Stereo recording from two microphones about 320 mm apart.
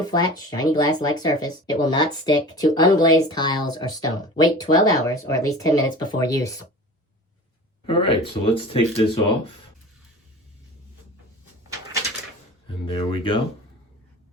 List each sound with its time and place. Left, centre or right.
0.0 s speech: centre
7.9 s speech: centre
12.9 s speech: centre